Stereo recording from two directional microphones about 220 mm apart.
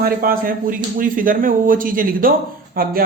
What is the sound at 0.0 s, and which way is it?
A man's voice, 40° right (ahead or behind).